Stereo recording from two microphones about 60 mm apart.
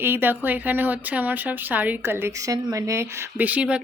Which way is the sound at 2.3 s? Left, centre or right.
Right.